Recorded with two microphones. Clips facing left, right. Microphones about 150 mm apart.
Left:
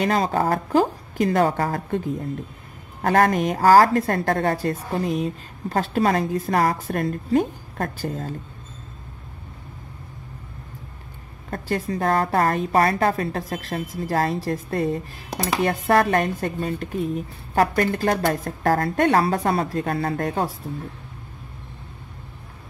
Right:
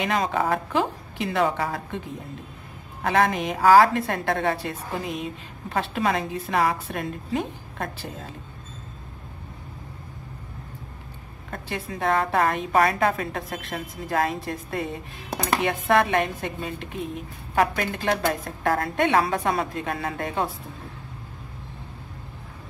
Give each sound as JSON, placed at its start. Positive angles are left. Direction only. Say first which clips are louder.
{"t": 0.0, "sound": "a woman's voice", "louder": "left 3 dB", "side_deg": 40}
{"t": 3.0, "sound": "a woman's voice", "louder": "left 4 dB", "side_deg": 45}
{"t": 11.5, "sound": "a woman's voice", "louder": "left 7 dB", "side_deg": 40}